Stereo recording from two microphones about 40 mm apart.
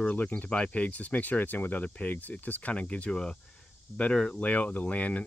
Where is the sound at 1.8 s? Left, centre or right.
Left.